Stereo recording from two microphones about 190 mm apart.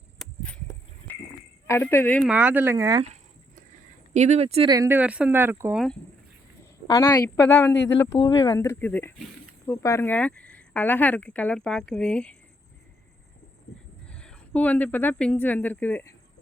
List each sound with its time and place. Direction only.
0.2 s a sound: centre (ahead or behind)
1.6 s speech: 15° left (ahead or behind)
2.3 s speech: 10° right (ahead or behind)
4.1 s speech: 35° right (ahead or behind)
4.7 s speech: 15° right (ahead or behind)
6.8 s speech: 15° left (ahead or behind)
14.2 s speech: 5° left (ahead or behind)